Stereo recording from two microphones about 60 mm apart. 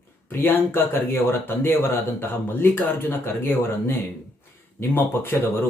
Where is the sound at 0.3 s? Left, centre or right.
Left.